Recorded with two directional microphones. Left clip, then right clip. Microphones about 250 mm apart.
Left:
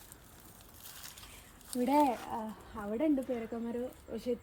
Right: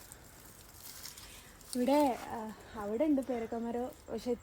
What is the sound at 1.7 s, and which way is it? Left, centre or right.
Speech, centre.